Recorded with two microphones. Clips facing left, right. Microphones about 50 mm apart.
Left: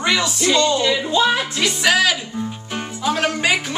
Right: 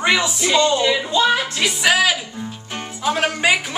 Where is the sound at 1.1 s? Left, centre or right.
Centre.